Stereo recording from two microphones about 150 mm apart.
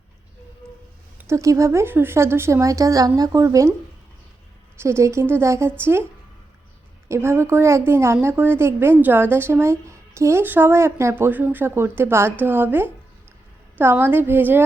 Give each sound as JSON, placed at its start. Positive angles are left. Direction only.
{"t": 1.2, "sound": "speech", "side_deg": -20}
{"t": 4.8, "sound": "a woman's voice", "side_deg": -15}
{"t": 7.1, "sound": "a woman's voice", "side_deg": -15}